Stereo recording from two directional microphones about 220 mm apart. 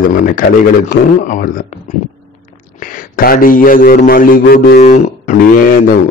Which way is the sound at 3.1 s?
40° left (ahead or behind).